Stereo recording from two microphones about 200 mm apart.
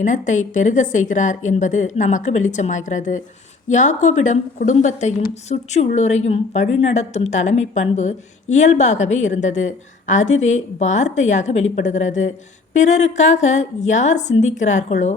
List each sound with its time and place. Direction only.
0.0 s a woman's voice: 40° left (ahead or behind)